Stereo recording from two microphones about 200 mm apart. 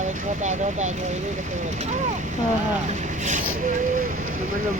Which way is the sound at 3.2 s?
35° right (ahead or behind).